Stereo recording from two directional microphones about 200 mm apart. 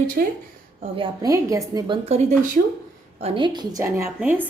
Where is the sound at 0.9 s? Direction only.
20° right (ahead or behind).